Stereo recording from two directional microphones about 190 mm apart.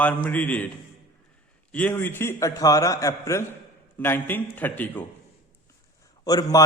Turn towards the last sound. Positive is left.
turn(degrees=20)  # may be behind; listen again after turning